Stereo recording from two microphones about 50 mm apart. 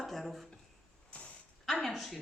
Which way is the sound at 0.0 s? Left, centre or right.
Centre.